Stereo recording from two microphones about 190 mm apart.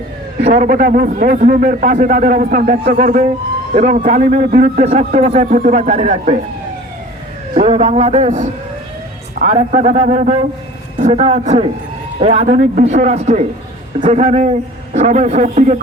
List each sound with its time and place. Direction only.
0.4 s a man's voice: 45° right (ahead or behind)
7.5 s a man's voice: 35° right (ahead or behind)